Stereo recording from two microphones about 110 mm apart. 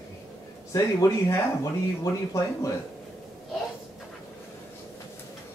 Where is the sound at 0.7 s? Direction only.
30° left (ahead or behind).